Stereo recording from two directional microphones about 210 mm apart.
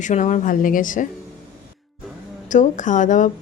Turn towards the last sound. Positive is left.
turn(degrees=35)  # may be behind; listen again after turning